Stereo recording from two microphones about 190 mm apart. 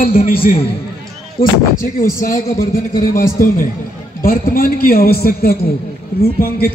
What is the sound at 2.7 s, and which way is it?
A man's voice, 45° left (ahead or behind).